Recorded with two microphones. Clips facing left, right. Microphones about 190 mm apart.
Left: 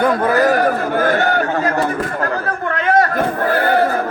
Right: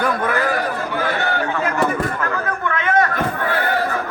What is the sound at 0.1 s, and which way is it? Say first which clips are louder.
Speech: left 6 dB; 30° left (ahead or behind).